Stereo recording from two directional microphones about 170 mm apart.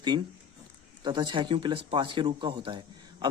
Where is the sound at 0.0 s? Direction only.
25° right (ahead or behind).